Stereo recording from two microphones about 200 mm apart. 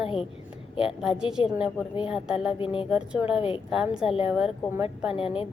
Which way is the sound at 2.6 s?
25° left (ahead or behind).